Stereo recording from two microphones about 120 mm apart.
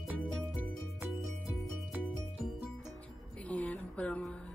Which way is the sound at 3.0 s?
10° left (ahead or behind).